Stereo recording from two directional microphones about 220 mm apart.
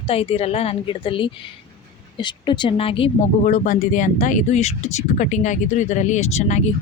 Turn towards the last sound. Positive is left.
turn(degrees=30)  # may be behind; listen again after turning